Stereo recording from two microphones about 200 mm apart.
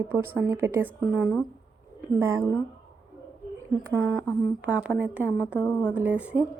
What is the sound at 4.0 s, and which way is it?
Speech, 5° left (ahead or behind).